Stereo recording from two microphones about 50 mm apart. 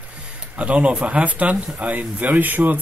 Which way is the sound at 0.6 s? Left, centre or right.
Right.